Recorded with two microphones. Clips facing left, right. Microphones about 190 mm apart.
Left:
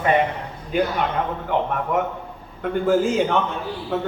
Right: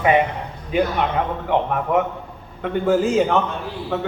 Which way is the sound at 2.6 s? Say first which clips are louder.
Right 1 dB; centre (ahead or behind).